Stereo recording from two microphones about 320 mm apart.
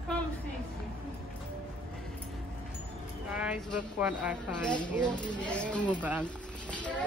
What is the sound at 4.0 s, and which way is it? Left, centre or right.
Speech, centre.